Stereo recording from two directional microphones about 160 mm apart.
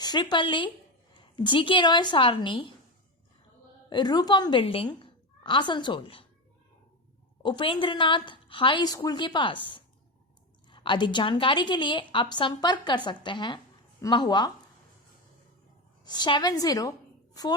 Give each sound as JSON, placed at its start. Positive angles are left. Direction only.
{"t": 0.0, "sound": "a woman's voice", "side_deg": 25}
{"t": 3.8, "sound": "a woman's voice", "side_deg": 25}
{"t": 7.4, "sound": "a woman's voice", "side_deg": 30}
{"t": 16.0, "sound": "a woman's voice", "side_deg": 25}